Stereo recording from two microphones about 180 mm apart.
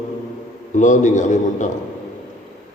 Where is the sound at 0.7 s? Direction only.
45° left (ahead or behind).